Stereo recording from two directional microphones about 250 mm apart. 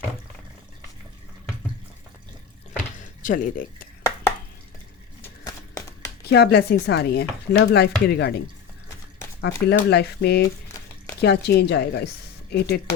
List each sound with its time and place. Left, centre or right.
3.2 s speech: left
6.2 s speech: left
9.4 s speech: left